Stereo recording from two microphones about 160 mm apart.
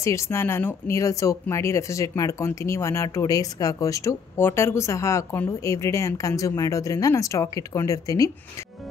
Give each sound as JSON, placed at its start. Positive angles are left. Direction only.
{"t": 0.0, "sound": "speech", "side_deg": 20}